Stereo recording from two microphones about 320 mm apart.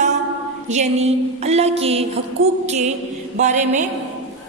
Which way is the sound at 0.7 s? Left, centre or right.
Right.